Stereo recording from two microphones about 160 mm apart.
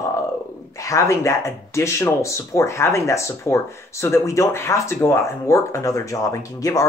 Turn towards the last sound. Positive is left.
turn(degrees=20)  # may be behind; listen again after turning